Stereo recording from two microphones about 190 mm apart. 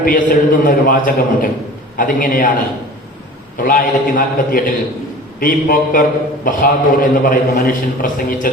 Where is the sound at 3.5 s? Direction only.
45° left (ahead or behind).